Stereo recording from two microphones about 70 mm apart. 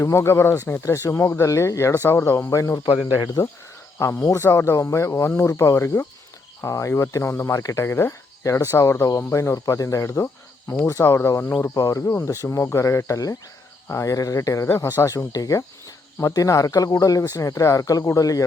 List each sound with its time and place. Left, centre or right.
0.0 s speech: left
3.9 s speech: left
10.7 s speech: left